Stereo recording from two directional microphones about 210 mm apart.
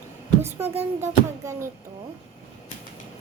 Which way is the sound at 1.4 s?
15° right (ahead or behind).